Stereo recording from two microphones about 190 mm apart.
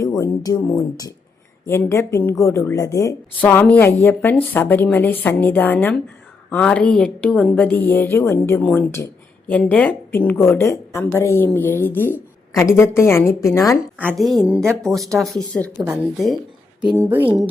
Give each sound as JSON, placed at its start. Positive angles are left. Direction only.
{"t": 0.0, "sound": "a woman's voice", "side_deg": 20}
{"t": 14.2, "sound": "speech", "side_deg": 0}
{"t": 16.8, "sound": "speech", "side_deg": -20}